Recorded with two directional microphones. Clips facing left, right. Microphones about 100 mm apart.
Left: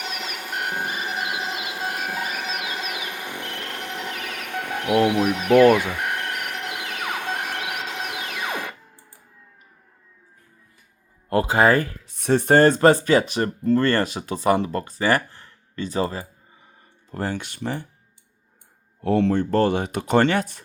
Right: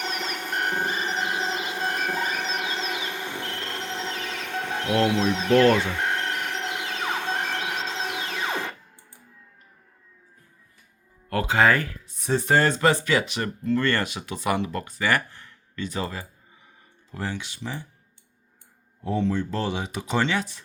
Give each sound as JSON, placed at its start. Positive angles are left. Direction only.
{"t": 0.0, "sound": "music", "side_deg": 10}
{"t": 1.4, "sound": "a sound", "side_deg": -35}
{"t": 1.6, "sound": "a sound", "side_deg": 10}
{"t": 2.6, "sound": "music", "side_deg": 15}
{"t": 4.4, "sound": "a sound", "side_deg": 15}
{"t": 4.8, "sound": "speech", "side_deg": 15}
{"t": 6.3, "sound": "train", "side_deg": 15}
{"t": 6.7, "sound": "a sound", "side_deg": 15}
{"t": 8.3, "sound": "music", "side_deg": 15}
{"t": 11.3, "sound": "speech", "side_deg": 25}
{"t": 12.0, "sound": "speech", "side_deg": 65}
{"t": 17.1, "sound": "speech", "side_deg": 45}
{"t": 19.0, "sound": "speech", "side_deg": 70}